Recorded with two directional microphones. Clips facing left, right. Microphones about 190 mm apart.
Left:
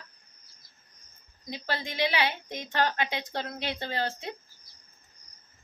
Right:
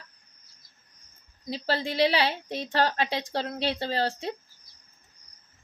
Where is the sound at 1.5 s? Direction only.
35° right (ahead or behind).